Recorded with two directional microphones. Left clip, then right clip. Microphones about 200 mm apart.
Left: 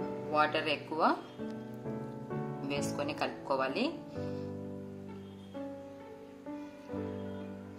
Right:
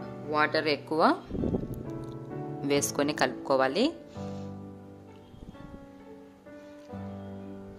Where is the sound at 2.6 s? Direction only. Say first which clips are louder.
Right 9 dB; 55° right (ahead or behind).